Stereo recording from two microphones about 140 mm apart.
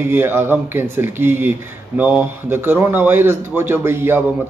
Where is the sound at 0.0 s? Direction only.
15° right (ahead or behind).